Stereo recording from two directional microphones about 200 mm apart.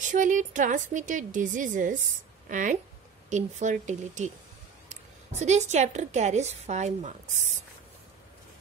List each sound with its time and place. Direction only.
0.0 s a woman's voice: 40° right (ahead or behind)
5.3 s speech: 35° right (ahead or behind)